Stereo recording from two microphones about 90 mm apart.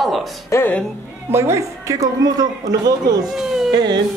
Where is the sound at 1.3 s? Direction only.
30° right (ahead or behind); by 3.2 s 45° right (ahead or behind).